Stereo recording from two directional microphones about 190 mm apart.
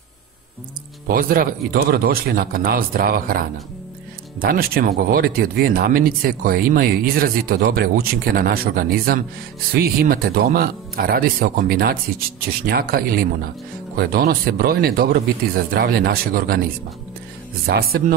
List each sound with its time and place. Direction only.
1.0 s speech: 50° right (ahead or behind)
17.6 s speech: 55° right (ahead or behind)